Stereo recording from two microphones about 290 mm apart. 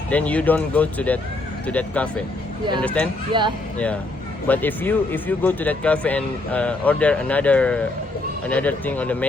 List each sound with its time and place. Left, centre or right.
0.1 s speech: centre
3.3 s speech: centre
4.4 s speech: centre